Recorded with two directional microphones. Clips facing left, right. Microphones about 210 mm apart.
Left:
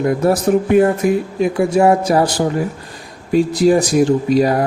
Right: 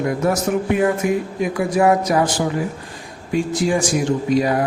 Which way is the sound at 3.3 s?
35° left (ahead or behind).